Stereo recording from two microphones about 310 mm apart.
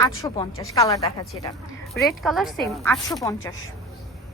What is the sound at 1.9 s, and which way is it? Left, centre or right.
A woman's voice, centre.